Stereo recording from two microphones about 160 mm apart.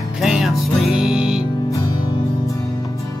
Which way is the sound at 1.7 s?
20° left (ahead or behind).